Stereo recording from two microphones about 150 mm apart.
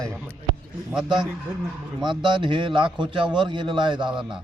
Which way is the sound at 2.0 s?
30° right (ahead or behind).